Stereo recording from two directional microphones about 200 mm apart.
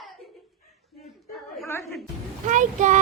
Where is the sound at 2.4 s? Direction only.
40° right (ahead or behind).